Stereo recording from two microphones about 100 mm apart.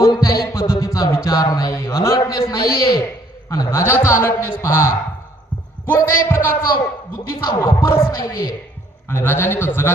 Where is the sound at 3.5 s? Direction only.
30° left (ahead or behind).